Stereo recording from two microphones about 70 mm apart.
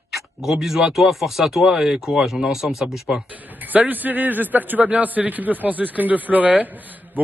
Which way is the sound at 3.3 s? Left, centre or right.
Right.